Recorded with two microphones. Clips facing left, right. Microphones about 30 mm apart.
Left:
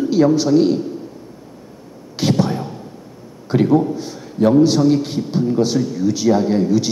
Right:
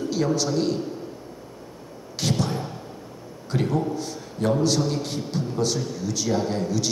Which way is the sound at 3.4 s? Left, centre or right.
Centre.